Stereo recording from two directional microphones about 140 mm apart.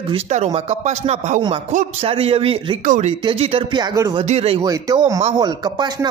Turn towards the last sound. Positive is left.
turn(degrees=-30)  # may be behind; listen again after turning